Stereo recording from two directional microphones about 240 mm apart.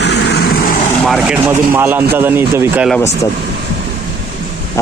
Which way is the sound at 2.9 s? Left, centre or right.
Centre.